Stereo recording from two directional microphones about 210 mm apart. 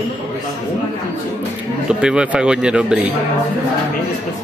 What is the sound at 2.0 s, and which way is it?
Speech, 5° right (ahead or behind).